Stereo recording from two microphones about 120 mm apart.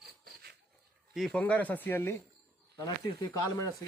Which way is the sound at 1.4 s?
10° left (ahead or behind).